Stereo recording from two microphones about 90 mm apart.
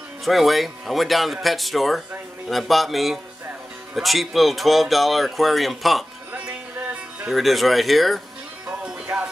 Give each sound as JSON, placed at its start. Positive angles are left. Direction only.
{"t": 0.2, "sound": "speech", "side_deg": 0}
{"t": 6.4, "sound": "music", "side_deg": -15}
{"t": 7.2, "sound": "speech", "side_deg": 0}
{"t": 8.6, "sound": "music", "side_deg": -20}